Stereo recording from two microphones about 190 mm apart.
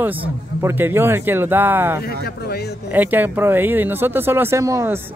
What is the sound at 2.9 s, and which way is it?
Speech, 10° right (ahead or behind).